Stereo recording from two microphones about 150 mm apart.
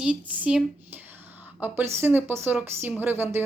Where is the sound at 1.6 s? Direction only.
15° right (ahead or behind).